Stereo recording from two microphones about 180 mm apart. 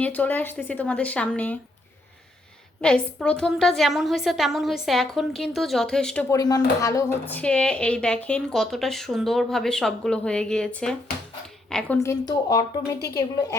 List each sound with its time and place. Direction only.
0.0 s speech: 10° left (ahead or behind)
2.8 s a woman's voice: 5° left (ahead or behind)
6.2 s a woman's voice: 20° left (ahead or behind)
11.9 s speech: 20° left (ahead or behind)